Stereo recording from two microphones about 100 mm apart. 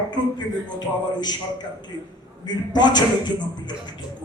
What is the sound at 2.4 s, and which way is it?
A man's voice, 45° left (ahead or behind).